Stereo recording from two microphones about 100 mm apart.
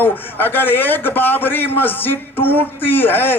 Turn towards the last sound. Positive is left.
turn(degrees=20)  # may be behind; listen again after turning